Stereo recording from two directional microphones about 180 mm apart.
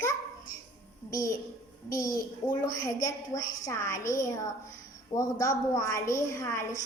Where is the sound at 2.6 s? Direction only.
20° left (ahead or behind).